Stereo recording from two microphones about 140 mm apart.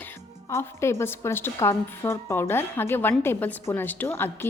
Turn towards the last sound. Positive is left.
turn(degrees=15)  # may be behind; listen again after turning